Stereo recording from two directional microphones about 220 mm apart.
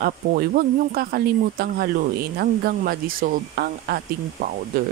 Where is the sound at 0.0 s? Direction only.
45° right (ahead or behind).